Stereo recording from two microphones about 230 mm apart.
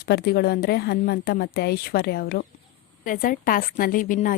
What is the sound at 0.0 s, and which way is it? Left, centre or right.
A woman's voice, left.